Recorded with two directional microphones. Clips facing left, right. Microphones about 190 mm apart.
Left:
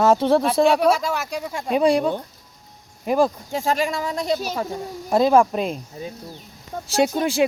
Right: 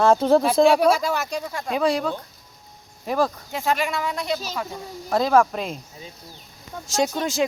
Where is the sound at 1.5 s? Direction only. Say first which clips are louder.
Left 5 dB; 20° left (ahead or behind).